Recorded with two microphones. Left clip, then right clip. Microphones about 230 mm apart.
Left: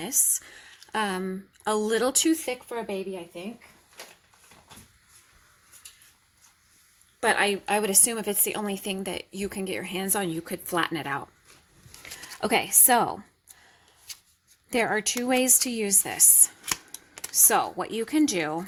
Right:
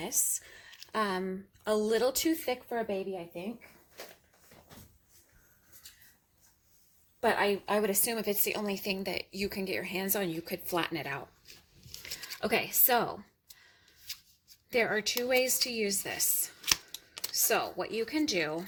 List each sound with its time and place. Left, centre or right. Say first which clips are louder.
0.0 s speech: left 5 dB; left
7.2 s speech: left 5 dB; left
12.4 s a woman's voice: left 7 dB; left
14.7 s a woman's voice: left 4 dB; left